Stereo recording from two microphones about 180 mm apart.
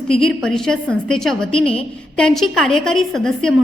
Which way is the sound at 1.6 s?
30° left (ahead or behind).